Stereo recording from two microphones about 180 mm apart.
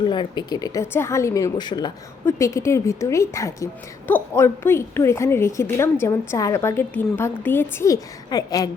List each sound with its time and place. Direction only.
0.0 s a woman's voice: 25° left (ahead or behind)